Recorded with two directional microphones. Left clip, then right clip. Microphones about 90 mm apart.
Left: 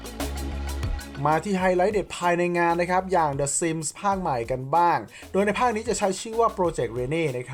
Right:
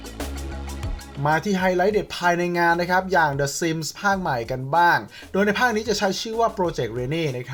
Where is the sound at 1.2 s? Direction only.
45° left (ahead or behind).